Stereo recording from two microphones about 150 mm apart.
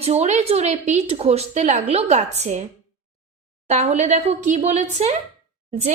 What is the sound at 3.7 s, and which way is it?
A woman's voice, 50° right (ahead or behind).